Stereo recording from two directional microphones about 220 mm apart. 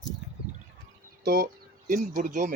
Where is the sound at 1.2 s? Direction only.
45° right (ahead or behind).